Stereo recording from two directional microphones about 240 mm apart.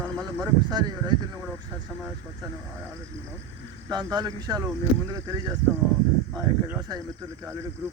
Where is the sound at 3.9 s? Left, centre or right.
Centre.